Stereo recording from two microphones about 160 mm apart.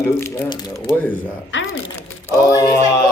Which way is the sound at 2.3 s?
20° left (ahead or behind).